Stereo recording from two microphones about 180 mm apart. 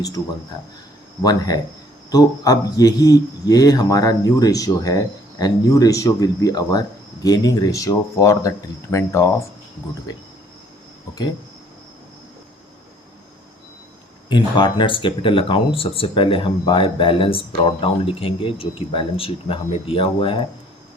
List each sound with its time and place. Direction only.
1.2 s speech: 20° left (ahead or behind)
14.3 s speech: 25° left (ahead or behind)